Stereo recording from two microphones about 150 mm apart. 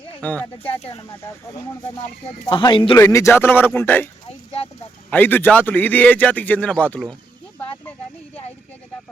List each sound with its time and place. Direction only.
0.2 s a man's voice: 10° left (ahead or behind)
2.5 s speech: 35° left (ahead or behind)
3.0 s a man's voice: 20° left (ahead or behind)
5.1 s a man's voice: 10° left (ahead or behind)